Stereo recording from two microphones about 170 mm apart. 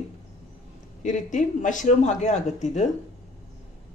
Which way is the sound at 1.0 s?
50° left (ahead or behind).